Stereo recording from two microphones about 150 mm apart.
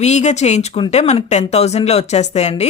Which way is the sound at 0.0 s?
50° left (ahead or behind).